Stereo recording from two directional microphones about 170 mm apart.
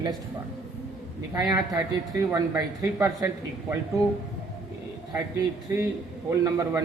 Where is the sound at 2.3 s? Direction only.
15° right (ahead or behind).